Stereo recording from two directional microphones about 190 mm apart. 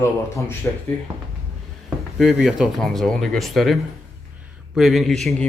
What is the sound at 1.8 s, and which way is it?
Speech, centre (ahead or behind).